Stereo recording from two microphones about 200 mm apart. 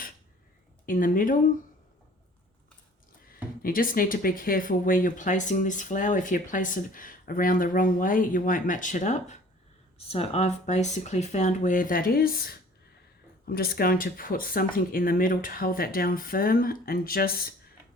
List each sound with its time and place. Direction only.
0.9 s speech: 45° left (ahead or behind)
3.6 s speech: 45° left (ahead or behind)